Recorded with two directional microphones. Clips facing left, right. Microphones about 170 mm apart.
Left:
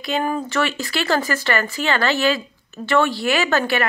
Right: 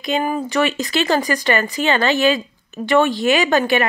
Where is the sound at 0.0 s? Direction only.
15° right (ahead or behind).